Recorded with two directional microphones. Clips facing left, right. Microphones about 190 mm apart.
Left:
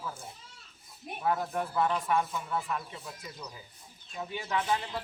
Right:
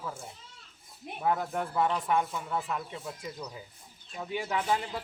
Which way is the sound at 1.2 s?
20° right (ahead or behind).